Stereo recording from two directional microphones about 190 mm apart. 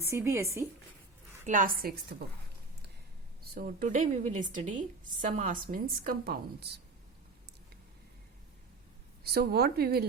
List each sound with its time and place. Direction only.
0.0 s speech: 15° right (ahead or behind)
1.5 s a woman's voice: 45° right (ahead or behind)
3.5 s a woman's voice: 50° right (ahead or behind)
9.2 s a woman's voice: 55° right (ahead or behind)